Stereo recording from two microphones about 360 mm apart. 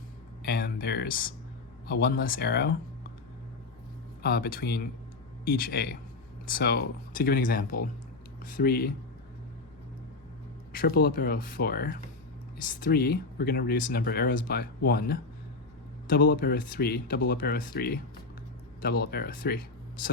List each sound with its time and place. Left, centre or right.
0.4 s speech: left
4.2 s speech: left
10.8 s speech: left